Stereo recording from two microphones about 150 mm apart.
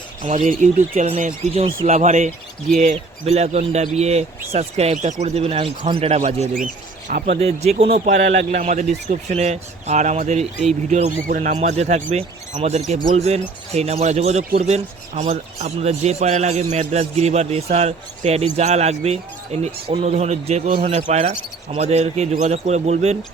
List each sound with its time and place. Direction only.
0.2 s a man's voice: 55° right (ahead or behind)
7.3 s a man's voice: 45° right (ahead or behind)